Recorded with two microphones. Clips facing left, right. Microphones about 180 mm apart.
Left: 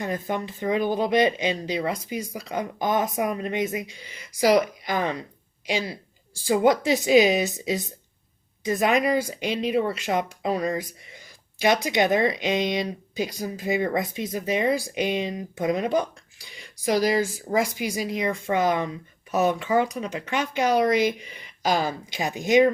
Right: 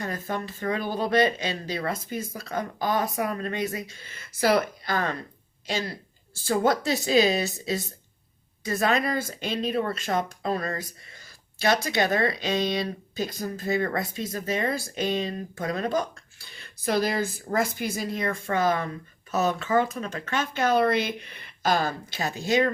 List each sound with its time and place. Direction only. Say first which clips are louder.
0.0 s speech: left 3 dB; 15° left (ahead or behind)